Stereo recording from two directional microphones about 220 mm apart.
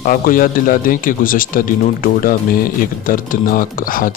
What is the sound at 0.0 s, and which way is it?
A man's voice, 40° left (ahead or behind).